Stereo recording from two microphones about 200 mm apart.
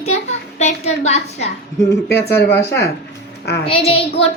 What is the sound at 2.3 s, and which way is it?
Speech, 10° left (ahead or behind).